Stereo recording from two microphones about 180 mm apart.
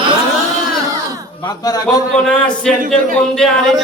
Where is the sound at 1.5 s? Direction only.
20° left (ahead or behind).